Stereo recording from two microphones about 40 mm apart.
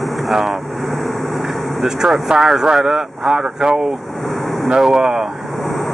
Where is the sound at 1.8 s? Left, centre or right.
Centre.